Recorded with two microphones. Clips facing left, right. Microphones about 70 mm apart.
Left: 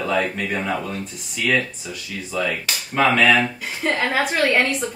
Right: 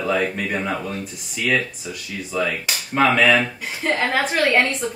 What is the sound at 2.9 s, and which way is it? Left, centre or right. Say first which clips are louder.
Speech: even; centre.